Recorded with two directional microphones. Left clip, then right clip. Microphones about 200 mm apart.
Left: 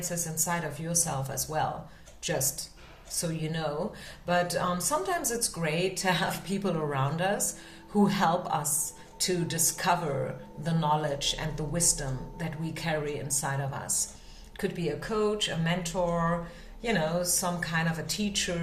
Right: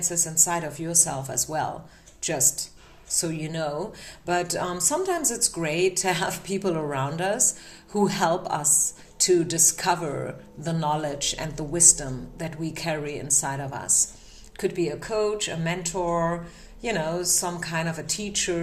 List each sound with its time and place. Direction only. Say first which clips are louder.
0.1 s a woman's voice: right 5 dB; 40° right (ahead or behind)
3.2 s a woman's voice: right 5 dB; 40° right (ahead or behind)